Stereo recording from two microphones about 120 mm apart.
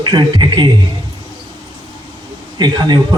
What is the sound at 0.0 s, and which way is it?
Speech, 40° right (ahead or behind).